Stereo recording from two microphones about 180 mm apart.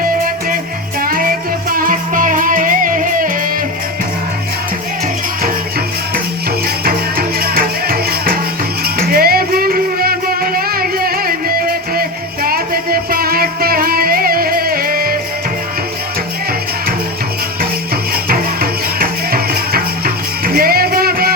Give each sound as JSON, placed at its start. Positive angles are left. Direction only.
{"t": 1.0, "sound": "music", "side_deg": -50}
{"t": 6.8, "sound": "music", "side_deg": -55}
{"t": 18.1, "sound": "music", "side_deg": -55}